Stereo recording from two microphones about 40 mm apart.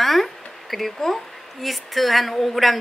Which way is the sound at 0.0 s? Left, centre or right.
Centre.